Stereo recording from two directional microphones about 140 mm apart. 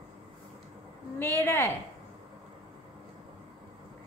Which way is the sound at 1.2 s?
15° left (ahead or behind).